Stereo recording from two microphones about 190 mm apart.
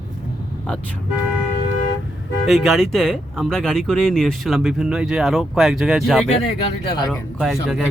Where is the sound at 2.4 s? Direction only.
Centre (ahead or behind).